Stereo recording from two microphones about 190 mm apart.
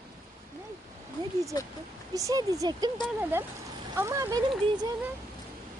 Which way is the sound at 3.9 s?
15° right (ahead or behind).